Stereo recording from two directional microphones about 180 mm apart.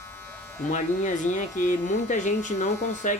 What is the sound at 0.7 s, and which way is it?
Speech, 45° left (ahead or behind).